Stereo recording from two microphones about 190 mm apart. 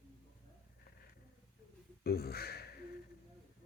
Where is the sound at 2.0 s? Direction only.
55° left (ahead or behind).